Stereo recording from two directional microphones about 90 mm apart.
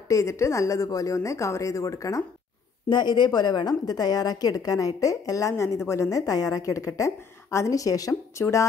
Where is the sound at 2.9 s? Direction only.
55° left (ahead or behind).